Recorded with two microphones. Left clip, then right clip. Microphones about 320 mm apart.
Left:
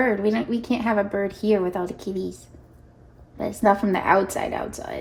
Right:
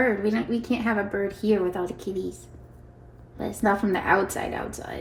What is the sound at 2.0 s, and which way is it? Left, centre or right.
Speech, centre.